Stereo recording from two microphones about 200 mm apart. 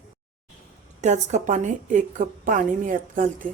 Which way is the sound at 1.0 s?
35° right (ahead or behind).